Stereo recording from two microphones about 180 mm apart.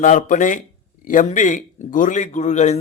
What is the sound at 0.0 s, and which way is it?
A man's voice, 45° left (ahead or behind).